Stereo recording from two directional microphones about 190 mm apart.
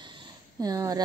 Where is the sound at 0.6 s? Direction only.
20° right (ahead or behind).